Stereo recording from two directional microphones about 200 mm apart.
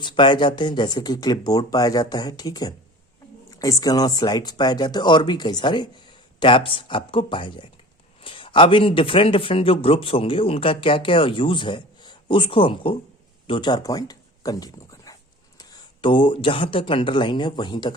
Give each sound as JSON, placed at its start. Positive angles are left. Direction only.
{"t": 0.0, "sound": "speech", "side_deg": 25}